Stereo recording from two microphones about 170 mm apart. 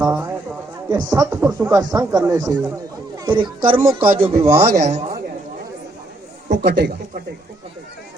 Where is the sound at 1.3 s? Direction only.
15° right (ahead or behind).